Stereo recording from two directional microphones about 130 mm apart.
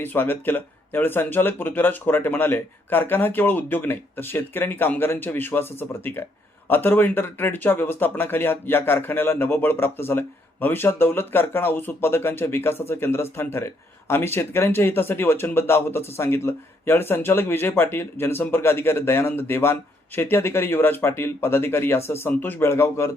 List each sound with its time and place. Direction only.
0.0 s speech: 15° left (ahead or behind)